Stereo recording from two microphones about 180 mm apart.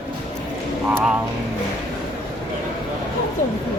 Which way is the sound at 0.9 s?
Centre (ahead or behind).